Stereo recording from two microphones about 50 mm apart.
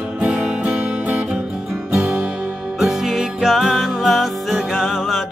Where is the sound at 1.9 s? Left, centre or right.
Centre.